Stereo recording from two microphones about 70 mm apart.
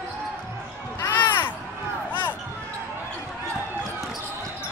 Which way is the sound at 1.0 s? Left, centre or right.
Left.